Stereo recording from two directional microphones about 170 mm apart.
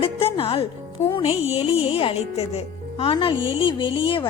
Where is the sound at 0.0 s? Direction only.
35° left (ahead or behind).